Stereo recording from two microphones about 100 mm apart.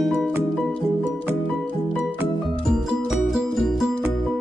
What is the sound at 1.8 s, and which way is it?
Music, 10° right (ahead or behind).